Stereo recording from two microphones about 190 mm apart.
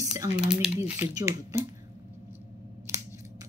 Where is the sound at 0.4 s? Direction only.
5° right (ahead or behind).